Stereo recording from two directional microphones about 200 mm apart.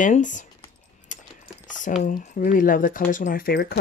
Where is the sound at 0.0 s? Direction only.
40° left (ahead or behind).